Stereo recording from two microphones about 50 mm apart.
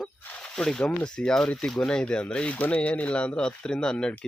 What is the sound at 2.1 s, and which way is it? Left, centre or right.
Speech, left.